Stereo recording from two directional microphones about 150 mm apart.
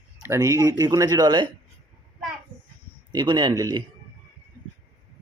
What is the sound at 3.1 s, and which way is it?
Speech, 30° right (ahead or behind).